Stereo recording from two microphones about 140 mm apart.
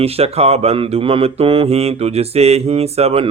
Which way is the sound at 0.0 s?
45° right (ahead or behind).